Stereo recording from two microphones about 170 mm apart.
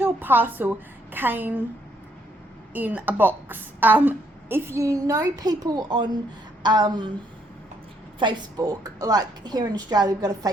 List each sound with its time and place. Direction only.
0.0 s a woman's voice: 10° right (ahead or behind)
2.7 s a woman's voice: 10° right (ahead or behind); by 7.1 s 25° right (ahead or behind)
8.2 s a woman's voice: 25° right (ahead or behind)